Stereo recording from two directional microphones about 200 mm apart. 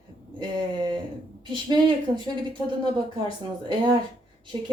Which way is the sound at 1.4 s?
20° right (ahead or behind).